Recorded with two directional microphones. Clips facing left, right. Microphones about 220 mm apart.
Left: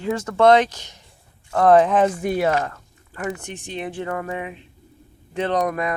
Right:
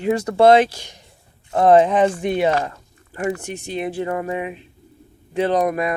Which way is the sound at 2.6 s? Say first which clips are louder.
Right 1 dB; 20° right (ahead or behind).